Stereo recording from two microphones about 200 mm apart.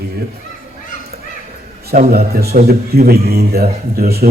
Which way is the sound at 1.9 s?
50° right (ahead or behind).